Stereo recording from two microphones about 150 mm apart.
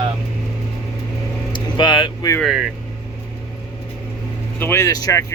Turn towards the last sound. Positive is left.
turn(degrees=25)  # may be behind; listen again after turning